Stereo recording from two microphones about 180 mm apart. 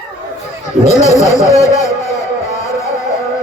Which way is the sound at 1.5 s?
15° left (ahead or behind).